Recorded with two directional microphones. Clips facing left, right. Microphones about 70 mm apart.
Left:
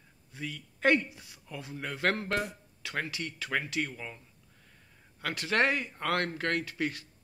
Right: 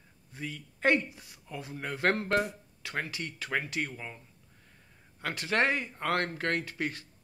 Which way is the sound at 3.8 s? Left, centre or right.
Centre.